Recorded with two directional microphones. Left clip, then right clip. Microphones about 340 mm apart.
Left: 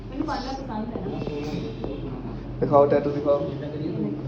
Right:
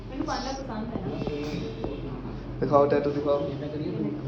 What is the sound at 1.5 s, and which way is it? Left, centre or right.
Music, right.